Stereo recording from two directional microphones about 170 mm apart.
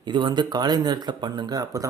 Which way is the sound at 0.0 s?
30° right (ahead or behind).